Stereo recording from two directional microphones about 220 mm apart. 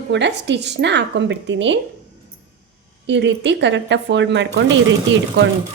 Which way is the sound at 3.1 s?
55° right (ahead or behind).